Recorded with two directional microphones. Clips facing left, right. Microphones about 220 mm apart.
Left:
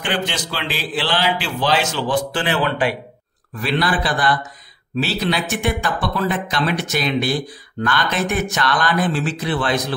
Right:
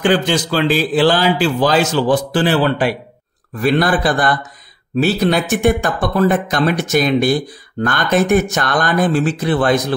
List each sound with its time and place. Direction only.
0.0 s a man's voice: 40° right (ahead or behind)
3.6 s speech: 45° right (ahead or behind)